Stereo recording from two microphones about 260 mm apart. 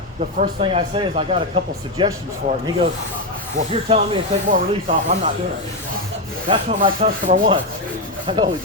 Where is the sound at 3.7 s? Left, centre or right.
Right.